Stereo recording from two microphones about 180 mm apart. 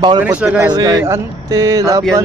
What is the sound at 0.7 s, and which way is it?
Speech, 20° right (ahead or behind).